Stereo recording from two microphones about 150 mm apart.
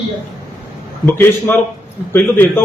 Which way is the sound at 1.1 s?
15° left (ahead or behind).